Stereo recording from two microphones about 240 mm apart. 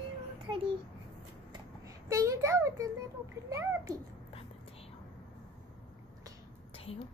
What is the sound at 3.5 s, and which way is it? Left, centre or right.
Speech, centre.